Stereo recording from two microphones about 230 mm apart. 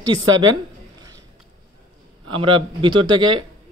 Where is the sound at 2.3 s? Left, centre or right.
Right.